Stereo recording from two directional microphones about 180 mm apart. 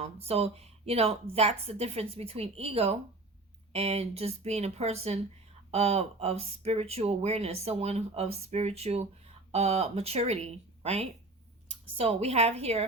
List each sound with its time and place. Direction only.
0.0 s speech: 35° right (ahead or behind)